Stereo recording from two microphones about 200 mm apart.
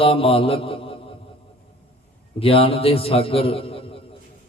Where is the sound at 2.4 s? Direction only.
30° left (ahead or behind).